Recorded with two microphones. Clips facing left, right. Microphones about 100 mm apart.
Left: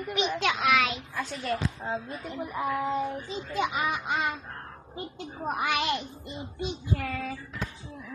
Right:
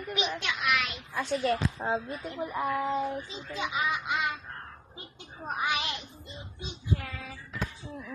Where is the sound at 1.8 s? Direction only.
45° right (ahead or behind).